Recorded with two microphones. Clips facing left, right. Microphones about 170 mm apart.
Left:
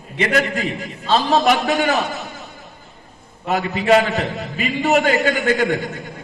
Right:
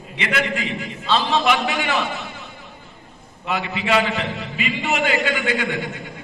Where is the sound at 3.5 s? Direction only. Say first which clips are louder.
Left 6 dB; 40° left (ahead or behind).